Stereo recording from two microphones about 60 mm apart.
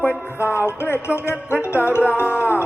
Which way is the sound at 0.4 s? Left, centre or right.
Left.